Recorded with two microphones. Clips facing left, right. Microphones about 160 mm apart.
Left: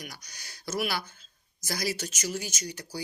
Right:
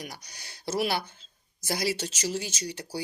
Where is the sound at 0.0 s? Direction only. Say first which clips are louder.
Right 3 dB; 25° right (ahead or behind).